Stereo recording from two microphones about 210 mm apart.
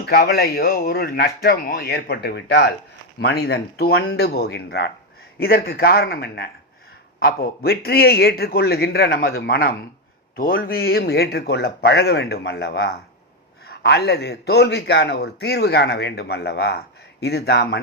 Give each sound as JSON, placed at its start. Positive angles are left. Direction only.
{"t": 0.0, "sound": "a man's voice", "side_deg": 45}